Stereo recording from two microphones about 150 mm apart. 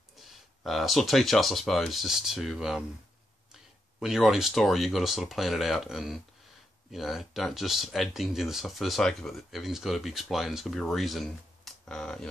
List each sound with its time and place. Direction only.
0.2 s speech: centre (ahead or behind)
4.0 s speech: centre (ahead or behind)